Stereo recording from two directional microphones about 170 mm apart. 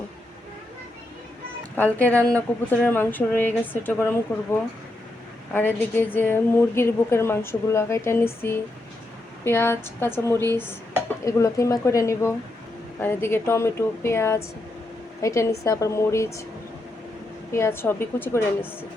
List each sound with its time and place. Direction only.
1.7 s a woman's voice: 10° left (ahead or behind)
5.5 s a woman's voice: 15° left (ahead or behind)
17.5 s a woman's voice: 15° left (ahead or behind)